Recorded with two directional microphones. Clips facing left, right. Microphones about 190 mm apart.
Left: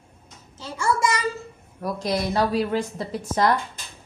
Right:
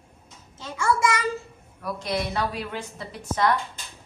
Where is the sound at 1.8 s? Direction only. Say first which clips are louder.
Left 3 dB; 40° left (ahead or behind).